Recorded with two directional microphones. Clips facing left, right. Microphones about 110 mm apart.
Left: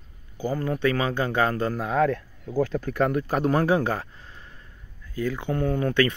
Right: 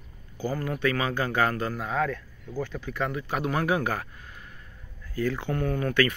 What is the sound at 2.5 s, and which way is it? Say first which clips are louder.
Speech: left 8 dB; 45° left (ahead or behind).